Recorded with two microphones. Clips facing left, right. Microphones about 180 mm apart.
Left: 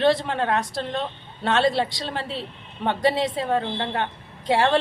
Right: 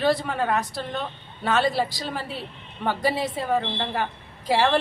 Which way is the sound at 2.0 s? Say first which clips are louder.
Left 2 dB; 30° left (ahead or behind).